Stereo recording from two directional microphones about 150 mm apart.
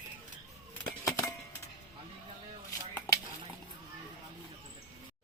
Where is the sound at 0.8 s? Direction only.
20° left (ahead or behind).